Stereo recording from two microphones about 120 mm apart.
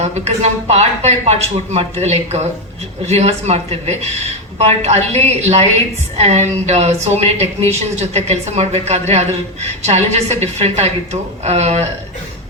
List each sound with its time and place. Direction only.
0.0 s a woman's voice: 70° right (ahead or behind)